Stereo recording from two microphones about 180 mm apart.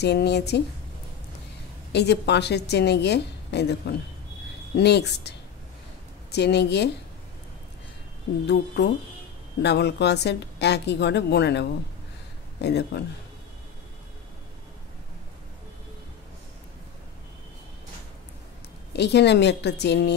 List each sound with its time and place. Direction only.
0.0 s a woman's voice: 65° left (ahead or behind)
1.9 s a woman's voice: 70° left (ahead or behind)
6.3 s a woman's voice: 70° left (ahead or behind)
8.5 s a woman's voice: 70° left (ahead or behind)
18.9 s a woman's voice: 70° left (ahead or behind)